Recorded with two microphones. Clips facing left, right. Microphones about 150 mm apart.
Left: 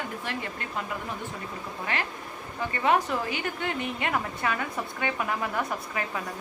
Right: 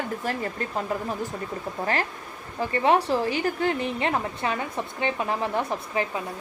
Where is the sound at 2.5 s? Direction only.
30° right (ahead or behind).